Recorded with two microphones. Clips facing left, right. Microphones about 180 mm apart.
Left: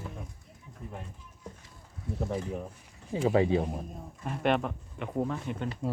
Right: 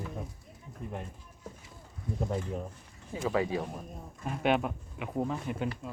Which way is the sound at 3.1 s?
30° left (ahead or behind).